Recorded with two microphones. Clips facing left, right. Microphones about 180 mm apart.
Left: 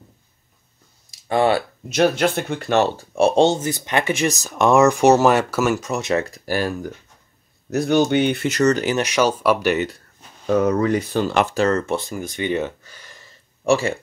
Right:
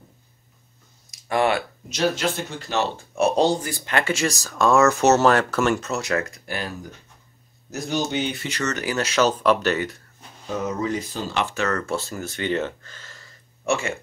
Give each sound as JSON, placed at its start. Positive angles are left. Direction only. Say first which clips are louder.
{"t": 1.1, "sound": "a sound", "louder": "left 3 dB", "side_deg": 30}
{"t": 1.9, "sound": "speech", "louder": "left 6 dB", "side_deg": 60}
{"t": 3.0, "sound": "speech", "louder": "left 1 dB", "side_deg": 30}
{"t": 5.9, "sound": "speech", "louder": "left 4 dB", "side_deg": 25}
{"t": 6.5, "sound": "speech", "louder": "left 9 dB", "side_deg": 50}
{"t": 7.7, "sound": "speech", "louder": "left 8 dB", "side_deg": 60}
{"t": 8.5, "sound": "speech", "louder": "left 9 dB", "side_deg": 35}
{"t": 8.9, "sound": "speech", "louder": "left 2 dB", "side_deg": 15}
{"t": 10.4, "sound": "speech", "louder": "left 8 dB", "side_deg": 60}
{"t": 11.5, "sound": "speech", "louder": "left 6 dB", "side_deg": 30}
{"t": 11.8, "sound": "speech", "louder": "left 3 dB", "side_deg": 15}
{"t": 13.7, "sound": "speech", "louder": "left 6 dB", "side_deg": 35}